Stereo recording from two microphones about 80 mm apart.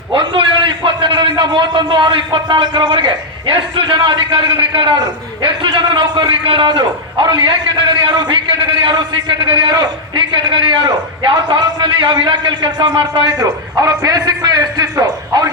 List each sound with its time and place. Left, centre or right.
0.1 s a man's voice: right
12.1 s a man's voice: right
13.4 s a man's voice: right